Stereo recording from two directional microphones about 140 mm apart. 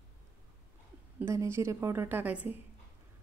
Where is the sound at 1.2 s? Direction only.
20° right (ahead or behind).